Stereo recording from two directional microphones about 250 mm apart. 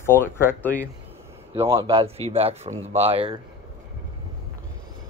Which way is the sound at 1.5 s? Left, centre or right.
Centre.